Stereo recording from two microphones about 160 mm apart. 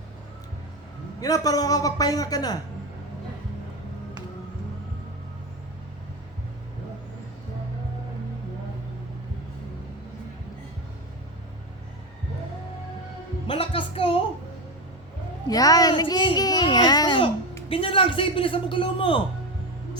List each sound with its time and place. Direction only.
1.2 s a man's voice: 20° left (ahead or behind)
13.5 s music: 35° left (ahead or behind)
15.4 s a sound: 20° left (ahead or behind)
17.7 s a man's voice: 35° left (ahead or behind)